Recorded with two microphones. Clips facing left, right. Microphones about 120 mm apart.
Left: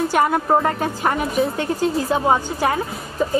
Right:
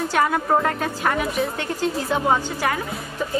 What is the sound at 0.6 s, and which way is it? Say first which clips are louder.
Speech: left 2 dB; 30° left (ahead or behind).